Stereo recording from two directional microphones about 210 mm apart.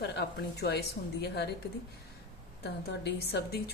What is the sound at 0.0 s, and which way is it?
Speech, 50° left (ahead or behind).